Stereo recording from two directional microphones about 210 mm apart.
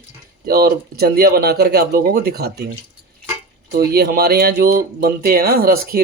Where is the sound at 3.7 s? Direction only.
45° right (ahead or behind).